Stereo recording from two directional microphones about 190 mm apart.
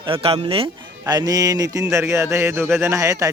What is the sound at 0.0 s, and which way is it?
Speech, 30° right (ahead or behind).